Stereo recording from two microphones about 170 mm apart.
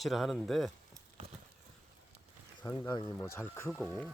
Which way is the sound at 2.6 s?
15° left (ahead or behind).